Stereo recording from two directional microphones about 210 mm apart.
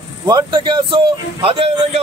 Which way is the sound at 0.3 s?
20° right (ahead or behind).